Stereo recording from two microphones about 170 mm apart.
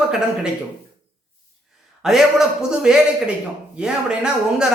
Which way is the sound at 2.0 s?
Centre (ahead or behind).